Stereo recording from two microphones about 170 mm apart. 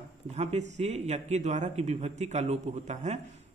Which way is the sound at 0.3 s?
40° right (ahead or behind).